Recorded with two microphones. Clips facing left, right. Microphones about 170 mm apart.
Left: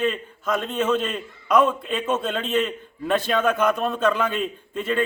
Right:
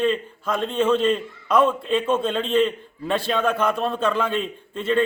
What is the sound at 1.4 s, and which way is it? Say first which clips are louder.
Speech: even; 30° right (ahead or behind).